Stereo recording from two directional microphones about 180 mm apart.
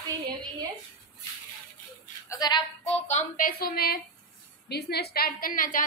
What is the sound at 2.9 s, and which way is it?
A woman's voice, 40° left (ahead or behind).